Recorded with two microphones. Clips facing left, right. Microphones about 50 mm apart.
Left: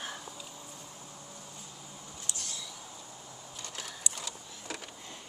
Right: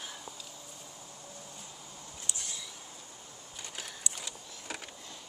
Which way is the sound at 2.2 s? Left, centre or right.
Centre.